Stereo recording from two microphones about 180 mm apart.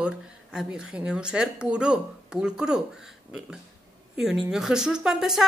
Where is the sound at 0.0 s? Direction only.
5° right (ahead or behind).